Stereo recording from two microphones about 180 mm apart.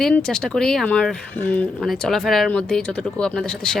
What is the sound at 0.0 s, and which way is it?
Speech, 5° left (ahead or behind).